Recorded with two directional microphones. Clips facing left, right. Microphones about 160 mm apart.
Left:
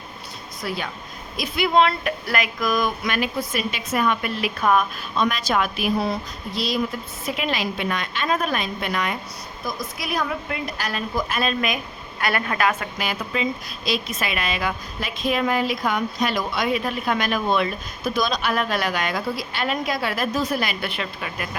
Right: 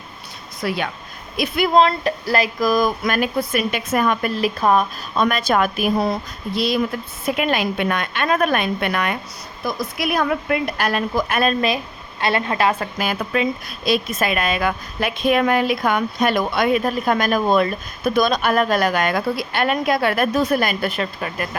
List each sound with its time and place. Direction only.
1.4 s a sound: 45° right (ahead or behind)
5.1 s speech: 50° right (ahead or behind)
7.3 s a woman's voice: 55° right (ahead or behind)
12.2 s a woman's voice: 25° right (ahead or behind)
13.0 s speech: 55° right (ahead or behind)